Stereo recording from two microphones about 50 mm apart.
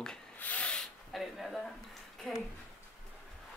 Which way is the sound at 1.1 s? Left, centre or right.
Centre.